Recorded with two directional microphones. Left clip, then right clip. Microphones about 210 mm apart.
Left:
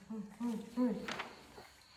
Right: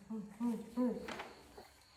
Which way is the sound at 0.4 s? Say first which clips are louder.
Left 1 dB; 15° left (ahead or behind).